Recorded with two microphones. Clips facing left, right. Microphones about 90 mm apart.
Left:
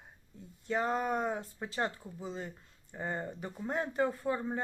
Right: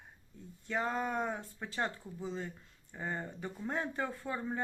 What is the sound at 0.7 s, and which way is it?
Speech, 15° left (ahead or behind).